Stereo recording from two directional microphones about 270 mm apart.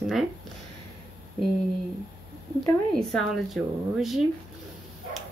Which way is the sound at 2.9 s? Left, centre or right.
Centre.